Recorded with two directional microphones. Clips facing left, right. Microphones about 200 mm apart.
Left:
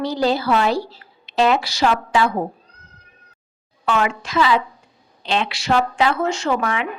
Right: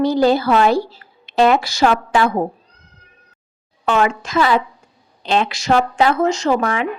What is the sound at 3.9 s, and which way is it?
A woman's voice, 45° right (ahead or behind).